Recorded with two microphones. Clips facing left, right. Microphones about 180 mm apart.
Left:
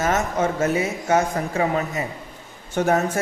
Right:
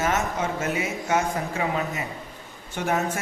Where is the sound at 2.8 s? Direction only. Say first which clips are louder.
Left 7 dB; 45° left (ahead or behind).